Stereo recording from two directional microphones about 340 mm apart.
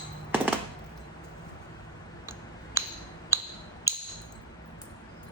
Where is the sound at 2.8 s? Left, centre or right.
Centre.